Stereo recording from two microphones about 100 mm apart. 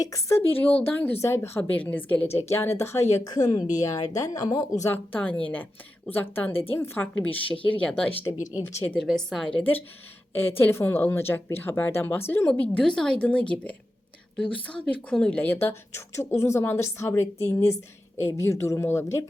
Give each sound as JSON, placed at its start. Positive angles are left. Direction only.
{"t": 0.0, "sound": "a woman's voice", "side_deg": 30}
{"t": 5.1, "sound": "a woman's voice", "side_deg": 15}
{"t": 8.2, "sound": "a woman's voice", "side_deg": 40}
{"t": 8.6, "sound": "a woman's voice", "side_deg": 20}
{"t": 9.0, "sound": "a woman's voice", "side_deg": 0}
{"t": 9.6, "sound": "a woman's voice", "side_deg": 20}